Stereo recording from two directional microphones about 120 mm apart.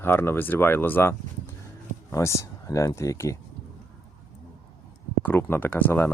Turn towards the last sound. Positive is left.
turn(degrees=15)  # may be behind; listen again after turning